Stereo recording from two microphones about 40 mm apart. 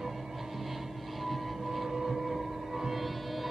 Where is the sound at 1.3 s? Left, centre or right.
Centre.